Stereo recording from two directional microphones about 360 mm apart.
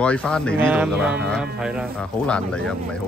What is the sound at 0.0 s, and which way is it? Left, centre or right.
Speech, centre.